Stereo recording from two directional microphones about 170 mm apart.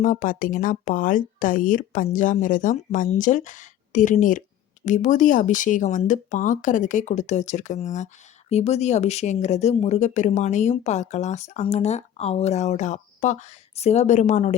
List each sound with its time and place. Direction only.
0.0 s speech: 50° left (ahead or behind)